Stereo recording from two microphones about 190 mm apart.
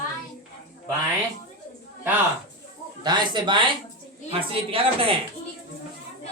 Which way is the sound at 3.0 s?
25° right (ahead or behind).